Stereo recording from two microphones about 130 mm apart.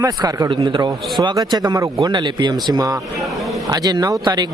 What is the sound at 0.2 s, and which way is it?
Speech, 30° right (ahead or behind).